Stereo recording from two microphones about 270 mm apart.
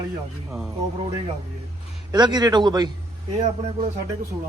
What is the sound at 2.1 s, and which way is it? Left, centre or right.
Speech, centre.